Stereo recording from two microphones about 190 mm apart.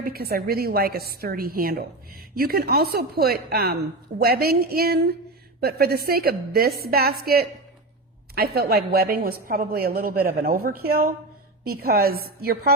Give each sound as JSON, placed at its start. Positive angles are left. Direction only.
{"t": 0.0, "sound": "a woman's voice", "side_deg": -55}